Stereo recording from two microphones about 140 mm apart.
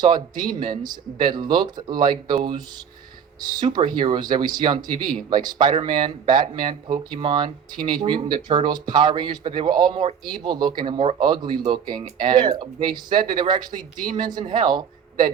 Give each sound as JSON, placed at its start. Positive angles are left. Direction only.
{"t": 0.0, "sound": "a man's voice", "side_deg": -30}